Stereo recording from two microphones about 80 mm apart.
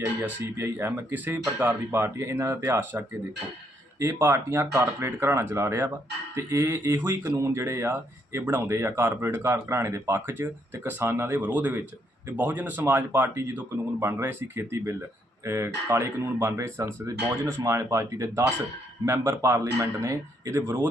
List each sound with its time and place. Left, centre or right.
0.2 s speech: right
4.0 s speech: right
17.6 s speech: right
17.9 s speech: right